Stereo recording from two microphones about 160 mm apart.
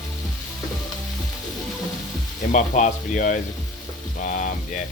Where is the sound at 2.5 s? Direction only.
50° left (ahead or behind).